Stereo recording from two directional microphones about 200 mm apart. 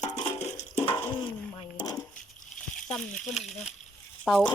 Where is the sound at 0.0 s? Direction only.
35° left (ahead or behind).